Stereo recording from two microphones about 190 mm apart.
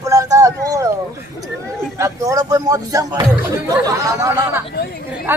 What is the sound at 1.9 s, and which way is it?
Speech, 15° right (ahead or behind).